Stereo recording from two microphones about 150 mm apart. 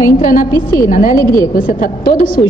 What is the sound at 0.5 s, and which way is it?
Speech, 20° left (ahead or behind).